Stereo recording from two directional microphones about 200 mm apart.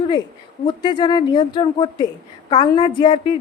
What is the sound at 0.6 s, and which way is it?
A woman's voice, 20° left (ahead or behind).